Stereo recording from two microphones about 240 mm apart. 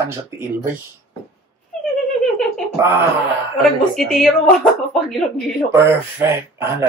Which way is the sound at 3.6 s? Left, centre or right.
Centre.